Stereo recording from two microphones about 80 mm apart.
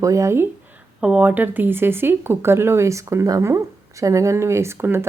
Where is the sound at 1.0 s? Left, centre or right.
Centre.